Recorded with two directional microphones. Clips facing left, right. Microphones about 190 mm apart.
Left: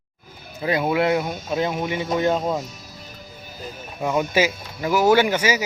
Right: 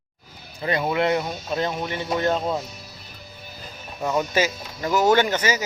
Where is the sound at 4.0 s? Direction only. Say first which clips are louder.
Left 2 dB; 10° left (ahead or behind).